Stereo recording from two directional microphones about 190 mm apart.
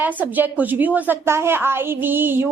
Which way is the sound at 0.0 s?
10° right (ahead or behind).